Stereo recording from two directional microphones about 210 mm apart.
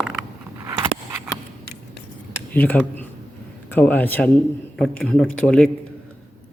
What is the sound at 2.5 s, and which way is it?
A man's voice, 10° left (ahead or behind).